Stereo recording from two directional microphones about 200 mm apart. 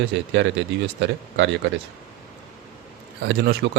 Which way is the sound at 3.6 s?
55° right (ahead or behind).